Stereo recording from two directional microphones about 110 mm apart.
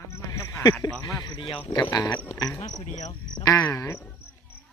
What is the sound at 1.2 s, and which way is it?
Speech, 50° left (ahead or behind).